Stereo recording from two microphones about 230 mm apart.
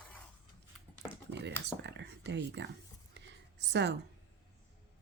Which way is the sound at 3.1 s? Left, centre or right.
Right.